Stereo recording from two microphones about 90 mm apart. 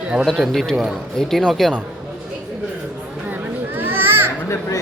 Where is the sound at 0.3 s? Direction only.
Centre (ahead or behind).